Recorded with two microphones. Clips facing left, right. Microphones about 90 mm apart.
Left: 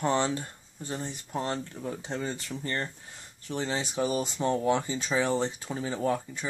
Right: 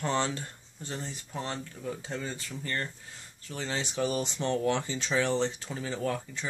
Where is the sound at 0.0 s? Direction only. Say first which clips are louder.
Left 3 dB; 20° left (ahead or behind).